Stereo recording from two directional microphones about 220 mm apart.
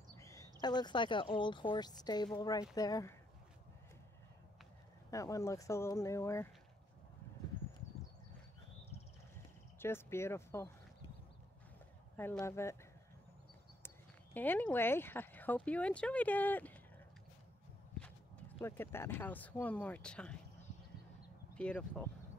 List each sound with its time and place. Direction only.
0.2 s speech: 15° left (ahead or behind)
5.1 s speech: 15° left (ahead or behind)
9.8 s speech: 10° left (ahead or behind)
12.2 s speech: 10° left (ahead or behind)
13.8 s speech: 10° left (ahead or behind)
18.6 s speech: 10° left (ahead or behind)
21.5 s speech: 5° left (ahead or behind)